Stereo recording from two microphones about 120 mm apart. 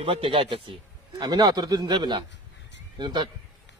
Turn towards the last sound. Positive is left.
turn(degrees=-40)  # may be behind; listen again after turning